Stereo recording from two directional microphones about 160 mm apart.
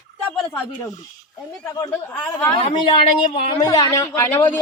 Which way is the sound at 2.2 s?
10° left (ahead or behind).